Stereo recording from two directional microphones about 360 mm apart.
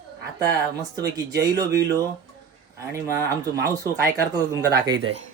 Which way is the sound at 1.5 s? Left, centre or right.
Centre.